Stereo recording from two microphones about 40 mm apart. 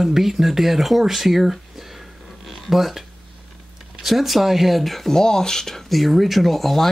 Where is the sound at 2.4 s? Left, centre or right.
Centre.